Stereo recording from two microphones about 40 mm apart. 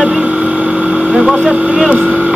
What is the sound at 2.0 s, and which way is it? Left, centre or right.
Speech, right.